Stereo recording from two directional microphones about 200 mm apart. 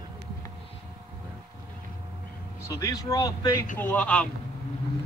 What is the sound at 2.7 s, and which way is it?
Speech, 15° left (ahead or behind).